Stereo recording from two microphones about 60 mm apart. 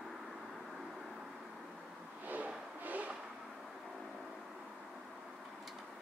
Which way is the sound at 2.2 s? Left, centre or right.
Right.